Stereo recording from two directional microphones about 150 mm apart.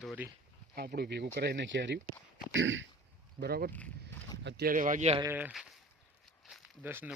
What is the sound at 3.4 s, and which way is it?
Speech, 90° right.